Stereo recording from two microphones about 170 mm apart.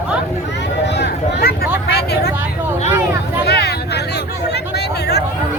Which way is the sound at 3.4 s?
75° left (ahead or behind).